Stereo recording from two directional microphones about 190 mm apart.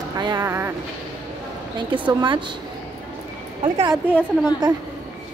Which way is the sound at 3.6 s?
25° right (ahead or behind).